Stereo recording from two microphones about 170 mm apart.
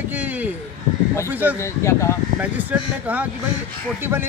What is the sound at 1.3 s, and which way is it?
Speech, 10° right (ahead or behind).